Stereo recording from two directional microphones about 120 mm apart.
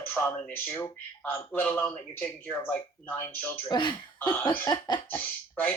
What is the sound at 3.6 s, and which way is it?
Speech, 40° left (ahead or behind).